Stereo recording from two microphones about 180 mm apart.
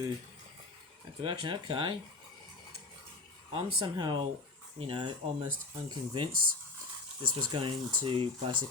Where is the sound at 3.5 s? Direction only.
30° right (ahead or behind).